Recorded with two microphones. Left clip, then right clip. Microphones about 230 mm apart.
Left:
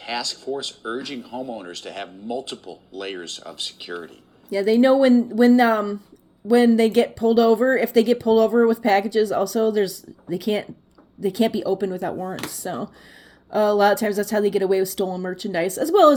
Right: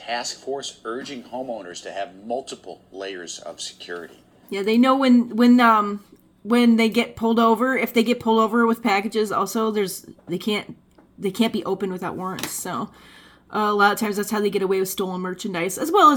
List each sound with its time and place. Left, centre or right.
0.5 s speech: left
0.9 s speech: left
3.2 s speech: centre
4.5 s speech: centre